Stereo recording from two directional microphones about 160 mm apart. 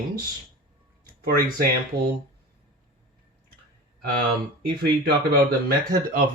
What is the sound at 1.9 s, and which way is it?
Speech, 70° right (ahead or behind).